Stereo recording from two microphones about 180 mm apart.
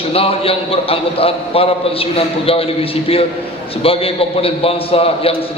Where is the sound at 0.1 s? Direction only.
30° left (ahead or behind).